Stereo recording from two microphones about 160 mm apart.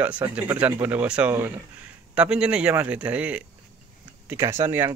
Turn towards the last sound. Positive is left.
turn(degrees=-15)  # may be behind; listen again after turning